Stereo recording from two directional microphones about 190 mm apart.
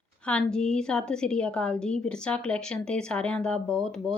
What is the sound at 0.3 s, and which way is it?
A woman's voice, 5° left (ahead or behind).